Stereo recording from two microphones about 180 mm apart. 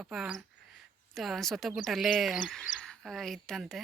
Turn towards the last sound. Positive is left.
turn(degrees=0)  # may be behind; listen again after turning